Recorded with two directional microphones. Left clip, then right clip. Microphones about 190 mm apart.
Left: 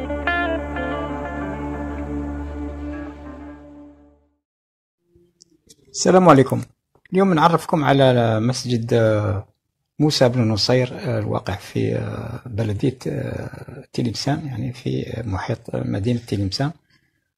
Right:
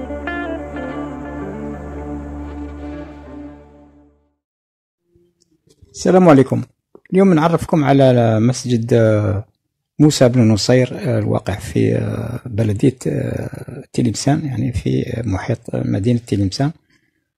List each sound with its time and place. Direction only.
0.0 s music: centre (ahead or behind)
5.9 s speech: 35° right (ahead or behind)
6.5 s speech: 50° right (ahead or behind)